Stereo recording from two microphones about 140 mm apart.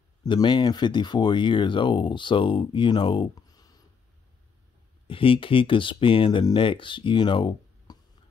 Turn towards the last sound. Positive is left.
turn(degrees=30)  # may be behind; listen again after turning